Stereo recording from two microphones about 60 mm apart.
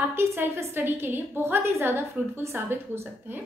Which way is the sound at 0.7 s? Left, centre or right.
Right.